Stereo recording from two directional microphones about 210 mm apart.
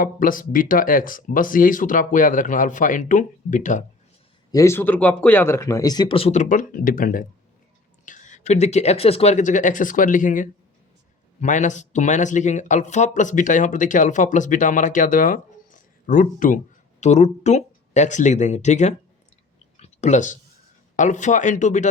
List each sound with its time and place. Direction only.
0.0 s speech: 40° left (ahead or behind)
4.5 s speech: 15° left (ahead or behind); by 18.9 s 35° left (ahead or behind)
19.7 s clicking: 30° left (ahead or behind)
20.9 s speech: 35° left (ahead or behind)